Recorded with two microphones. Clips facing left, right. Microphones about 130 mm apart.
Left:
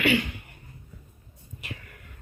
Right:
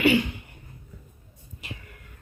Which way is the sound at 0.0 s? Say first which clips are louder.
Right 3 dB; 30° right (ahead or behind).